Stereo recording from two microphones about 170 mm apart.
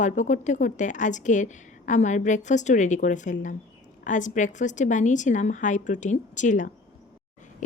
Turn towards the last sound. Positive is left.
turn(degrees=45)  # may be behind; listen again after turning